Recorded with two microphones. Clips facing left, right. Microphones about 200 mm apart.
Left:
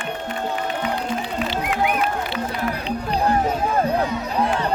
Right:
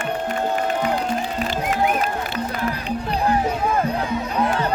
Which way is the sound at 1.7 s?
40° right (ahead or behind).